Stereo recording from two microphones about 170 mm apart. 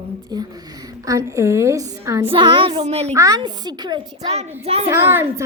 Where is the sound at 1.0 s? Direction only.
20° right (ahead or behind).